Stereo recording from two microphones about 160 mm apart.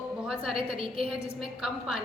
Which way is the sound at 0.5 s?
35° right (ahead or behind).